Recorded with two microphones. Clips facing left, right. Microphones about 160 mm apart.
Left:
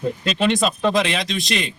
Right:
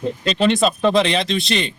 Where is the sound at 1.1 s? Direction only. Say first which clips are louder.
Right 4 dB; 30° right (ahead or behind).